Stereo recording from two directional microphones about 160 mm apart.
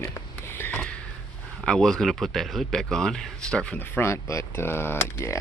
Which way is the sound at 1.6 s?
5° left (ahead or behind).